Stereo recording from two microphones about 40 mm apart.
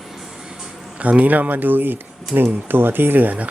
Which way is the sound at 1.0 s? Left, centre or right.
Right.